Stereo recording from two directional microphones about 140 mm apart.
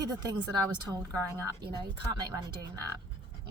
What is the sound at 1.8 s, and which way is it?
Speech, 30° right (ahead or behind).